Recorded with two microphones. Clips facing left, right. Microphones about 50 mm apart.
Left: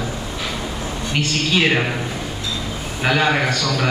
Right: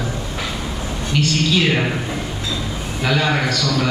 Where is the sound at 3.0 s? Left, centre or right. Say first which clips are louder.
Left 1 dB; left.